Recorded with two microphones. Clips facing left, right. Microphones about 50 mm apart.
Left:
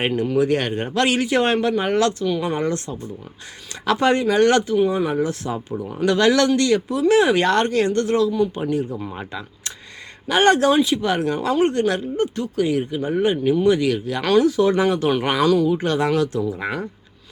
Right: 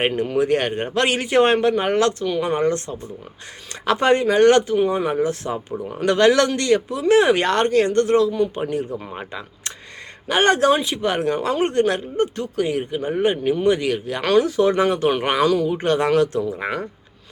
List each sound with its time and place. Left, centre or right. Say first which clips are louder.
0.0 s speech: even; right
15.7 s speech: right 1 dB; right